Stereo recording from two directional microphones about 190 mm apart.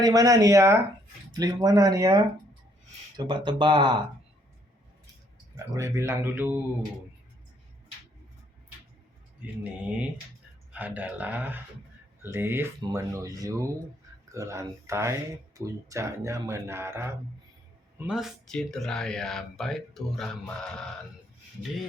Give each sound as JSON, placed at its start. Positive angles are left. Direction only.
{"t": 0.0, "sound": "speech", "side_deg": -20}
{"t": 5.5, "sound": "speech", "side_deg": -15}
{"t": 10.7, "sound": "speech", "side_deg": -10}